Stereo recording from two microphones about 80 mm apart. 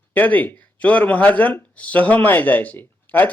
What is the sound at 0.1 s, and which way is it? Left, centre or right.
Speech, centre.